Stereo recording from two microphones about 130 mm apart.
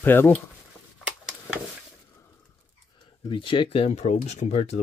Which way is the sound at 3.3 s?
40° left (ahead or behind).